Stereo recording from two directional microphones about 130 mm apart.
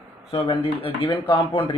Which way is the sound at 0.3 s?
45° left (ahead or behind).